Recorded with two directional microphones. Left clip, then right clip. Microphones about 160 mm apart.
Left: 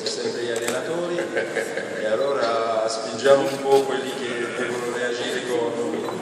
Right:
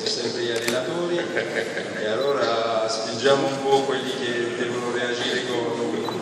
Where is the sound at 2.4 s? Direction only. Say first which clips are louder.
Even; 55° left (ahead or behind).